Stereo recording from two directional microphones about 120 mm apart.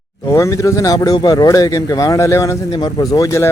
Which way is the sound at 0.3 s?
25° left (ahead or behind).